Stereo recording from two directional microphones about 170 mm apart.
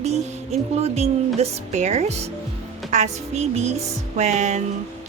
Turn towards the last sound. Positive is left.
turn(degrees=-40)  # may be behind; listen again after turning